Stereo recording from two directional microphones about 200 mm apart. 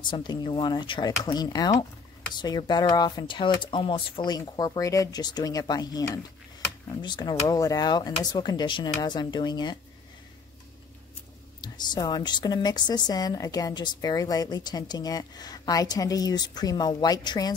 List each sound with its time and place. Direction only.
0.0 s a woman's voice: 25° left (ahead or behind)
11.6 s a woman's voice: 20° left (ahead or behind)